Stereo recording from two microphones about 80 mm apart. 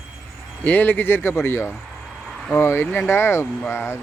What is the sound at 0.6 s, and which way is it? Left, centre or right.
Speech, left.